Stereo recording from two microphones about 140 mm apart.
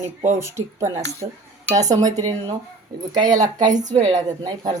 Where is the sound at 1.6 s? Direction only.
25° right (ahead or behind).